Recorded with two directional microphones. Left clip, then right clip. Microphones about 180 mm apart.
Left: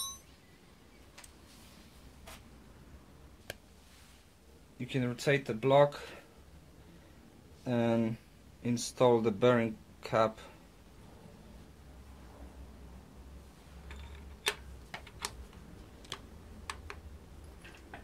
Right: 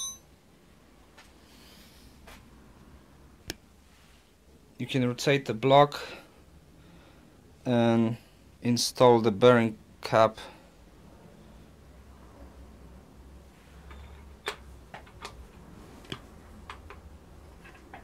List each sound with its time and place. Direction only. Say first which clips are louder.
4.7 s speech: right 7 dB; 45° right (ahead or behind)
7.6 s speech: right 6 dB; 40° right (ahead or behind)
14.4 s tick-tock: left 2 dB; 15° left (ahead or behind)